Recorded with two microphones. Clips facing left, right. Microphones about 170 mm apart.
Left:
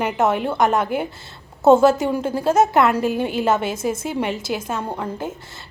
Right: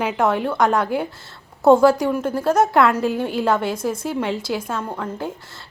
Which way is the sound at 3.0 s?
70° left (ahead or behind).